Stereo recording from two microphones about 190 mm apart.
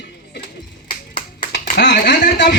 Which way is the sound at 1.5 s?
65° left (ahead or behind).